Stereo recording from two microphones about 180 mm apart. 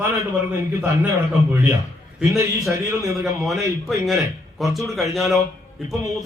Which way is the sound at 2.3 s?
15° right (ahead or behind).